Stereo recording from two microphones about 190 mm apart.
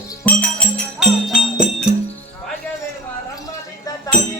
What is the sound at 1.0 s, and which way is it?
Music, centre (ahead or behind).